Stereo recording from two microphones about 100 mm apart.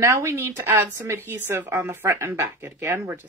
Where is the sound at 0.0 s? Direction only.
30° right (ahead or behind).